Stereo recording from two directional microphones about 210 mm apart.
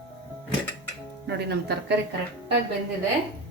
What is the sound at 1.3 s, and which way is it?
Speech, 50° right (ahead or behind).